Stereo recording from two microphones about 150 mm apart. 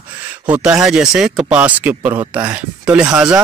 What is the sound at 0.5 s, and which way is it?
Speech, 5° right (ahead or behind).